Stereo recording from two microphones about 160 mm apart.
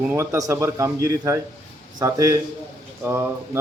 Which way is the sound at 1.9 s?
20° right (ahead or behind).